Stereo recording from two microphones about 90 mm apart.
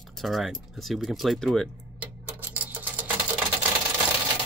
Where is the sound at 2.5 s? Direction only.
15° right (ahead or behind).